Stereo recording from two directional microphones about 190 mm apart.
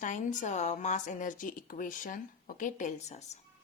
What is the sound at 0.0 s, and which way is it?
Speech, 40° left (ahead or behind).